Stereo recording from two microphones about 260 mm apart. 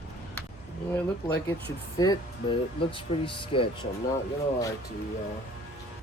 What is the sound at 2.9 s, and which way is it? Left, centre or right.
Speech, centre.